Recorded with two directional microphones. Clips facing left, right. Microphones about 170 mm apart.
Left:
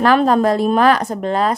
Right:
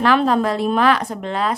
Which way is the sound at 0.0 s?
45° left (ahead or behind).